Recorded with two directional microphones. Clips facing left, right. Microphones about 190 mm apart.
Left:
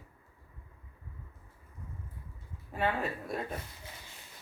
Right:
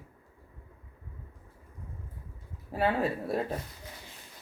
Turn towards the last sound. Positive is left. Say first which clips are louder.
# right 6 dB
turn(degrees=-30)  # may be behind; listen again after turning